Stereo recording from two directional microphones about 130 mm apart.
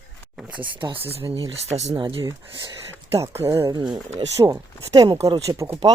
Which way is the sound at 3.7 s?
35° right (ahead or behind).